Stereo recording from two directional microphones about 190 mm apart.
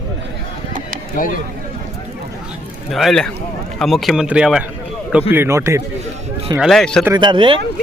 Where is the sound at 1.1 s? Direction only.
45° left (ahead or behind).